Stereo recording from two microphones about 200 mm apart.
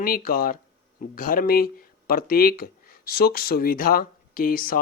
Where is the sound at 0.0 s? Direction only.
45° left (ahead or behind).